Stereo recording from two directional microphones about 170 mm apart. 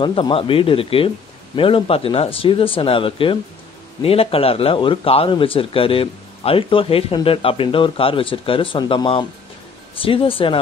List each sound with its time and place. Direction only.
0.0 s speech: 30° left (ahead or behind)